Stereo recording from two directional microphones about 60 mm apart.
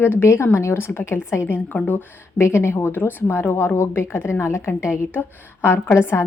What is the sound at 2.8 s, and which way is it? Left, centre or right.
A woman's voice, left.